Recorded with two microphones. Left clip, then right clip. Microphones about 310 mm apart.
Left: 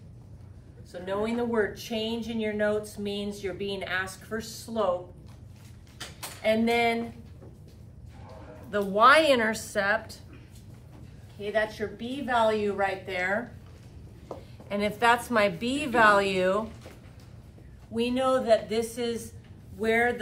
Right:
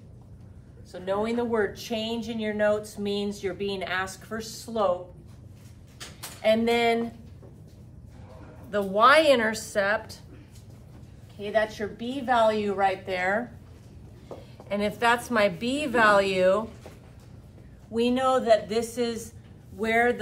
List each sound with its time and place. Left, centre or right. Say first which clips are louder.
0.9 s speech: right 2 dB; centre
6.4 s speech: right 2 dB; centre
8.6 s a woman's voice: even; centre
11.4 s speech: right 2 dB; centre
14.7 s a woman's voice: even; centre
17.9 s speech: right 2 dB; centre